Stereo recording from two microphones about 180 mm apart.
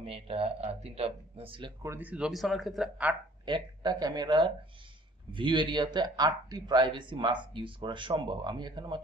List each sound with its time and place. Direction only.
0.0 s speech: 30° right (ahead or behind)
1.8 s speech: 10° right (ahead or behind)
3.4 s speech: 25° right (ahead or behind)